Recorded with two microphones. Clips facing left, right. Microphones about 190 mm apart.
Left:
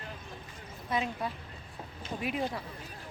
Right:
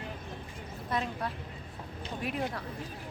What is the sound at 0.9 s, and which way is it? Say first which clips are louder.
Speech: left 1 dB; centre (ahead or behind).